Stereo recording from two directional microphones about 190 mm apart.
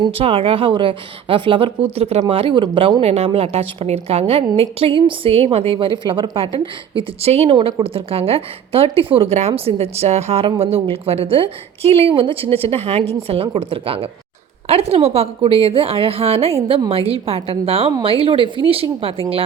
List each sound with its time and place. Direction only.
0.0 s a woman's voice: 30° right (ahead or behind)